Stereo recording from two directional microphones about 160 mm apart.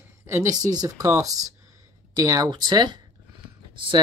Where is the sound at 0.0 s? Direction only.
15° right (ahead or behind).